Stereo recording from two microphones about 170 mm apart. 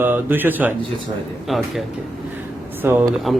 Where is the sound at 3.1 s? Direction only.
Centre (ahead or behind).